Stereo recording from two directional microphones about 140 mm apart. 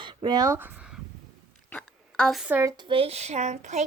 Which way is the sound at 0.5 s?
15° right (ahead or behind).